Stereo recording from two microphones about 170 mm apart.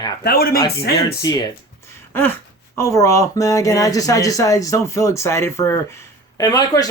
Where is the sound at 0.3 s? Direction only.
65° left (ahead or behind).